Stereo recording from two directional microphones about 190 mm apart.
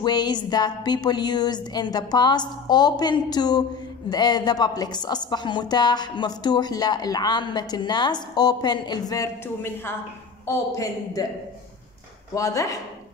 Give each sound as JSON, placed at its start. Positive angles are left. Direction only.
{"t": 0.0, "sound": "a woman's voice", "side_deg": 20}
{"t": 12.4, "sound": "speech", "side_deg": 15}